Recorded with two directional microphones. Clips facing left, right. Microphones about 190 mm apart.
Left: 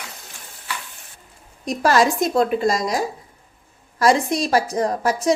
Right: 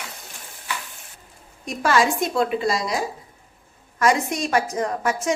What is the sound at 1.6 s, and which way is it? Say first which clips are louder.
A woman's voice: left 3 dB; 40° left (ahead or behind).